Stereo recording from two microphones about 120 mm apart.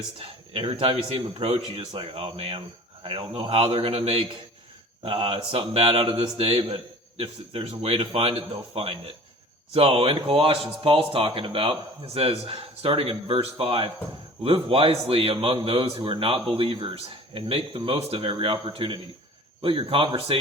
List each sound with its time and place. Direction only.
0.2 s a man's voice: 55° right (ahead or behind)